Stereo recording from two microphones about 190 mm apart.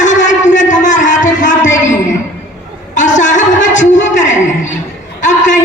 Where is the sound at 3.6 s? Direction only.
75° left (ahead or behind).